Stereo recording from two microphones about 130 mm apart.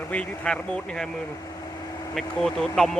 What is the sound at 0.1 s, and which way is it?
Speech, 10° left (ahead or behind).